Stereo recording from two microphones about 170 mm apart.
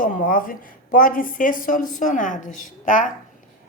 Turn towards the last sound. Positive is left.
turn(degrees=50)  # may be behind; listen again after turning